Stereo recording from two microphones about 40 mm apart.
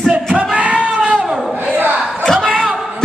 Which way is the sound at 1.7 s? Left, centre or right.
Right.